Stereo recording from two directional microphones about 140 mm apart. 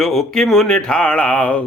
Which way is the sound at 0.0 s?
Centre (ahead or behind).